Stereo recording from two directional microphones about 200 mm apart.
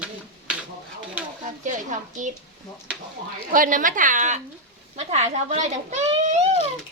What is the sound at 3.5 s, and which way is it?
A woman's voice, 40° right (ahead or behind).